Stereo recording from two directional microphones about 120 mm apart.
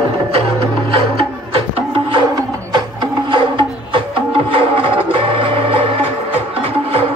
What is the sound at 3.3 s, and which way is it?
Music, 45° right (ahead or behind).